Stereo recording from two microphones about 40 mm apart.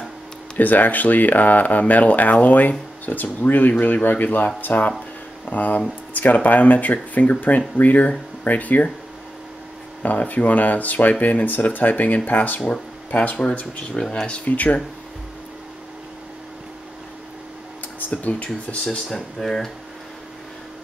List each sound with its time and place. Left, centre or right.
0.6 s speech: left
10.0 s speech: left
17.9 s speech: left
19.4 s speech: centre